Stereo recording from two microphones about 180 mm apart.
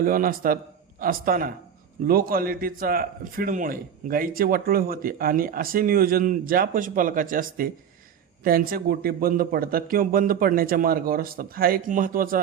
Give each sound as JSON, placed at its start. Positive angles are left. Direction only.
{"t": 0.0, "sound": "a man's voice", "side_deg": -50}